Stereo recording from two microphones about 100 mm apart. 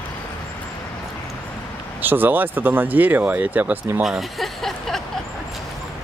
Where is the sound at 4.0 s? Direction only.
Centre (ahead or behind).